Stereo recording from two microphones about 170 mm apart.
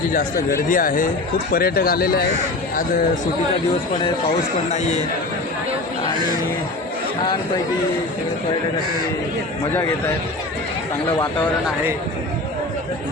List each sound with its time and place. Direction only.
0.1 s speech: 55° left (ahead or behind)
4.7 s a man's voice: 40° left (ahead or behind)